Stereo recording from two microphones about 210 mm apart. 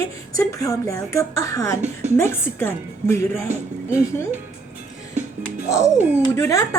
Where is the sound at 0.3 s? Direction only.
15° left (ahead or behind).